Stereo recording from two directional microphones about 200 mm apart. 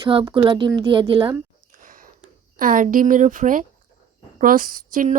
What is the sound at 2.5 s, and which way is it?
A woman's voice, 45° right (ahead or behind).